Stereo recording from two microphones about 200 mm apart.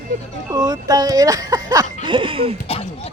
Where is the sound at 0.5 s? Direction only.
20° right (ahead or behind).